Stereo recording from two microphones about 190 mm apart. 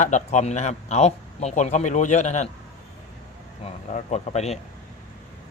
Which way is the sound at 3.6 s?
35° left (ahead or behind).